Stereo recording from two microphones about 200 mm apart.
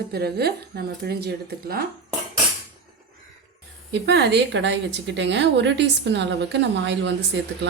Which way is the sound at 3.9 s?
60° right (ahead or behind).